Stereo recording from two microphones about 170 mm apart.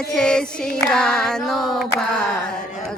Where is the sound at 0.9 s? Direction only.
5° left (ahead or behind).